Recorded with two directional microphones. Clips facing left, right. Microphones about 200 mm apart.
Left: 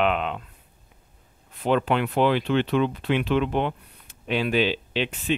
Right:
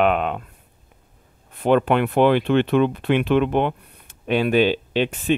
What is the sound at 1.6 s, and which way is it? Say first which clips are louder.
Speech: right 5 dB; 55° right (ahead or behind).